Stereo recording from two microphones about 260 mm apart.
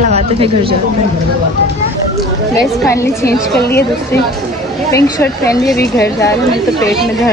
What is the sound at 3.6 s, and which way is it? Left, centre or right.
Speech, left.